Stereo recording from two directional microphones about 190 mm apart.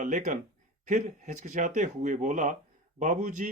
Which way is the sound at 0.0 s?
40° right (ahead or behind).